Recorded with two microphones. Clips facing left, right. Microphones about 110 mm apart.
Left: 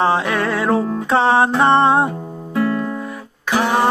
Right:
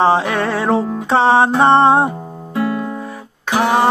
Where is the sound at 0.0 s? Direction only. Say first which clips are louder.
Right 3 dB; 25° right (ahead or behind).